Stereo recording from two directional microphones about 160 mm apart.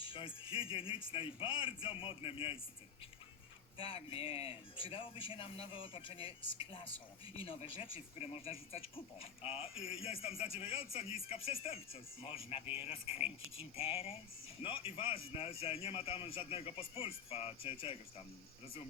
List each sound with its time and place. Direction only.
0.0 s a man's voice: 30° left (ahead or behind)
3.8 s a man's voice: 35° left (ahead or behind)